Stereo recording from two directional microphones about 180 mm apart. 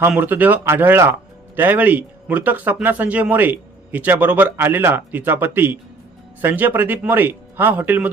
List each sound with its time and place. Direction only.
0.0 s speech: 10° right (ahead or behind)